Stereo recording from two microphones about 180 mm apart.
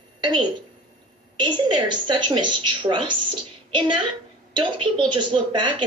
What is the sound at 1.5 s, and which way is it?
A woman's voice, 25° right (ahead or behind).